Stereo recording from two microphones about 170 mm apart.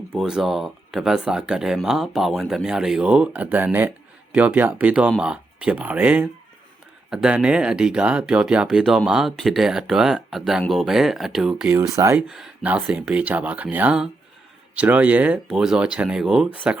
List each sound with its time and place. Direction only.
0.2 s speech: centre (ahead or behind)
11.8 s speech: 15° right (ahead or behind)
12.3 s speech: 5° right (ahead or behind)